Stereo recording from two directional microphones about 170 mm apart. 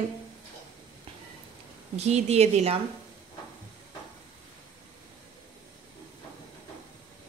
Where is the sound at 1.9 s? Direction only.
40° right (ahead or behind).